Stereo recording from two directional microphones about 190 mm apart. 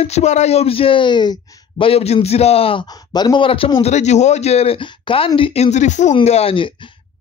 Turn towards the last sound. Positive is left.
turn(degrees=30)  # may be behind; listen again after turning